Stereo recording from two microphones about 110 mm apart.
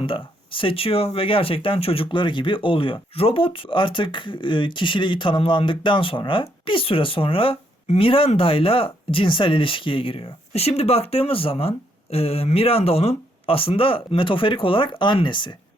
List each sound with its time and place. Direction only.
0.0 s speech: 50° left (ahead or behind)